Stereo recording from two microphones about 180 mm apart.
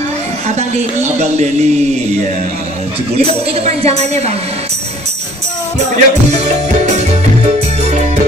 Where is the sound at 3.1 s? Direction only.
35° right (ahead or behind).